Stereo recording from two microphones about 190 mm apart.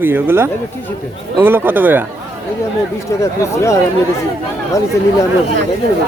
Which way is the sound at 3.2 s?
15° left (ahead or behind).